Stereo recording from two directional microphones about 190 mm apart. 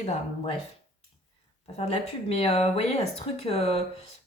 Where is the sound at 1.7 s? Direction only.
35° left (ahead or behind).